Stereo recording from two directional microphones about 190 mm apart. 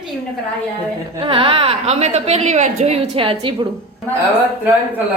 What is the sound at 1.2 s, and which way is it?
A woman's voice, 25° right (ahead or behind).